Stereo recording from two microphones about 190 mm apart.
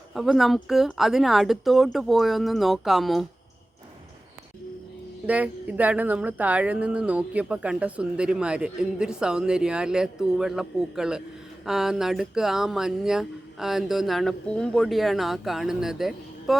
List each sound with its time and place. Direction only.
0.1 s speech: centre (ahead or behind)
5.2 s speech: 5° right (ahead or behind)